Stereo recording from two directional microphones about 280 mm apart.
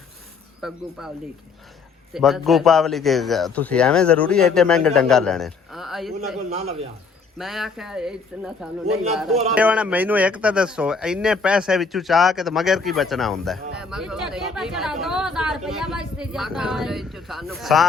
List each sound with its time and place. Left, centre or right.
0.6 s speech: centre
2.1 s speech: centre
6.5 s a man's voice: right
7.3 s speech: centre